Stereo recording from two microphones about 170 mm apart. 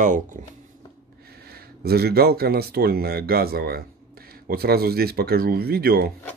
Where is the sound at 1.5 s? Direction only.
65° right (ahead or behind).